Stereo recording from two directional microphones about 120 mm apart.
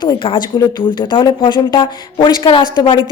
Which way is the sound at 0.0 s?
40° left (ahead or behind).